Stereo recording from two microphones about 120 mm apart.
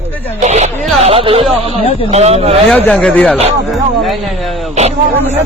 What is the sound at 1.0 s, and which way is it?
Speech, 55° right (ahead or behind).